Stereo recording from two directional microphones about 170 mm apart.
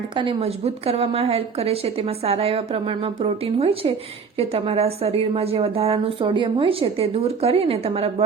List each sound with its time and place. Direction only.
0.2 s a woman's voice: 30° right (ahead or behind)